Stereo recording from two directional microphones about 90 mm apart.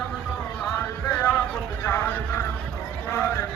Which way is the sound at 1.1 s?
20° left (ahead or behind).